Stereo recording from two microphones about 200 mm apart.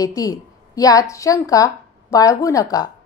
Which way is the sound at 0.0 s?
15° left (ahead or behind).